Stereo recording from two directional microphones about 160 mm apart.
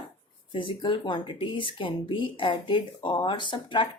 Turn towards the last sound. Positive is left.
turn(degrees=30)  # may be behind; listen again after turning